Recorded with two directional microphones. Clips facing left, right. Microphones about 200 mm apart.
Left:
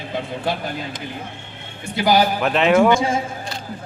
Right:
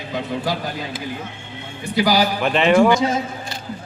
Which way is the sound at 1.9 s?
25° left (ahead or behind).